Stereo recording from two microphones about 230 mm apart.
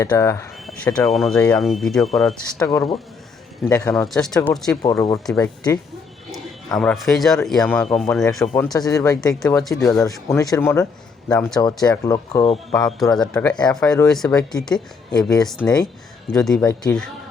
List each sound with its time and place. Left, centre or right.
0.0 s speech: centre
2.6 s speech: centre
4.7 s a man's voice: centre
8.7 s speech: centre
9.3 s speech: centre
10.1 s speech: centre
12.7 s speech: centre
15.7 s speech: centre
16.3 s speech: centre